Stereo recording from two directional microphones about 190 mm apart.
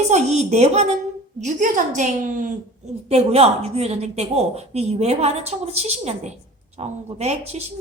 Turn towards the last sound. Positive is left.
turn(degrees=-35)  # may be behind; listen again after turning